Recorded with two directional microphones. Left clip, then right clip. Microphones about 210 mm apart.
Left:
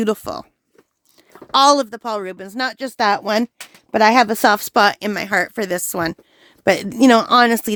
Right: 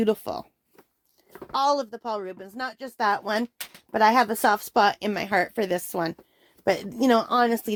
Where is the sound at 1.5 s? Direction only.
45° left (ahead or behind).